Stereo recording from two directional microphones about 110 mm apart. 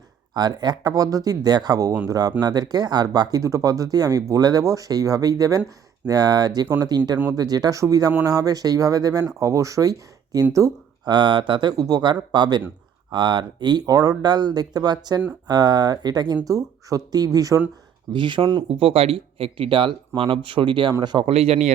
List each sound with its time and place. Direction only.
0.3 s speech: 40° right (ahead or behind)
10.5 s a sound: 30° right (ahead or behind)
11.1 s speech: 45° right (ahead or behind)
11.8 s speech: 35° right (ahead or behind)
18.1 s speech: 45° right (ahead or behind)
18.7 s speech: 60° right (ahead or behind); by 21.2 s 40° right (ahead or behind)
21.2 s speech: 70° right (ahead or behind)